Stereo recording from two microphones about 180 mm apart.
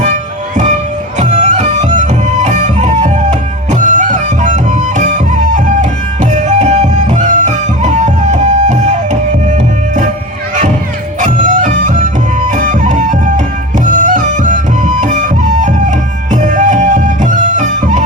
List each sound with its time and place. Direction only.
0.0 s music: 45° right (ahead or behind)
11.2 s music: 45° right (ahead or behind)